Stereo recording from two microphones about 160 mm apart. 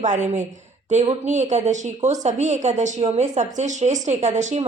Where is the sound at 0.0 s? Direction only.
50° right (ahead or behind).